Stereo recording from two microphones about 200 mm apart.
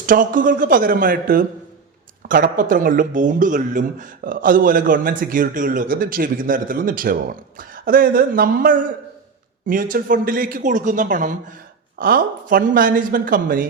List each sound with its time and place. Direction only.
0.0 s speech: 40° right (ahead or behind)